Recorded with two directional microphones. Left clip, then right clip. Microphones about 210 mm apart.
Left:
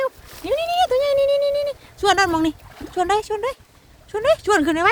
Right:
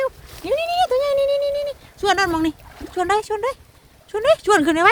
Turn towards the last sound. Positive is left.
turn(degrees=-15)  # may be behind; listen again after turning